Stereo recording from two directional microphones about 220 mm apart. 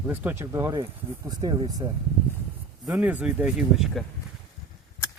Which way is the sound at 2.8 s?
5° right (ahead or behind).